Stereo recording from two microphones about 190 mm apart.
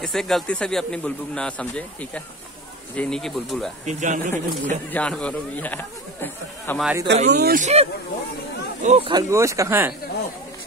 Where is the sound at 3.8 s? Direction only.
40° right (ahead or behind).